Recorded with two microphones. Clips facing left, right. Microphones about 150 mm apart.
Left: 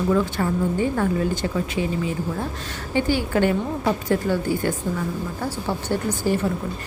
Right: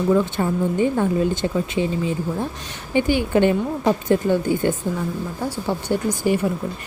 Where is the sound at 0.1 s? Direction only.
20° right (ahead or behind).